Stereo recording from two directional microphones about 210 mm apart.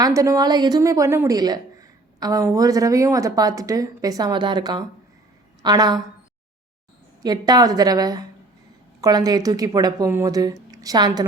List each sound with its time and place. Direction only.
0.0 s a woman's voice: 15° right (ahead or behind)
7.2 s a woman's voice: 20° right (ahead or behind)